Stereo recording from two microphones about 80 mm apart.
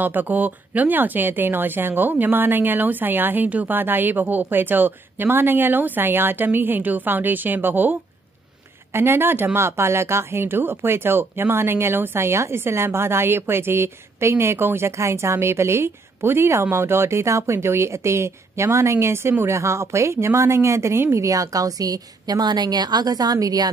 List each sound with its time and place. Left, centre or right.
0.0 s speech: right
8.9 s speech: right